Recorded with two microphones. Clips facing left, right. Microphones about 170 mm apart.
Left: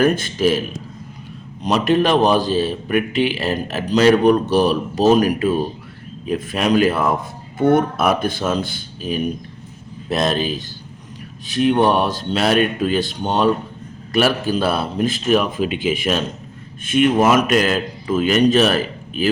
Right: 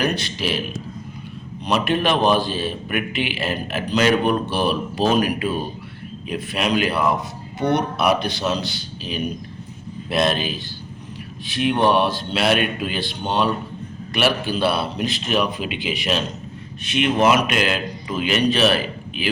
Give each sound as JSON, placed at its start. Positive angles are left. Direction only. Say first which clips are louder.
{"t": 0.0, "sound": "a man's voice", "louder": "left 7 dB", "side_deg": 45}
{"t": 1.6, "sound": "a man's voice", "louder": "left 4 dB", "side_deg": 40}